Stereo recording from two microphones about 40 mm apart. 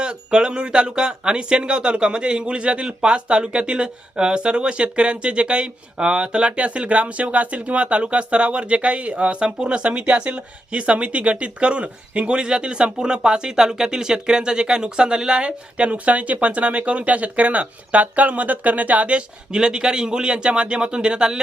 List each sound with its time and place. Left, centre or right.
0.0 s speech: right
19.1 s speech: right